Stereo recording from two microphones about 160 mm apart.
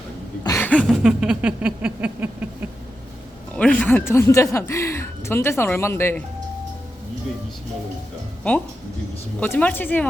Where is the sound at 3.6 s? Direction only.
10° left (ahead or behind).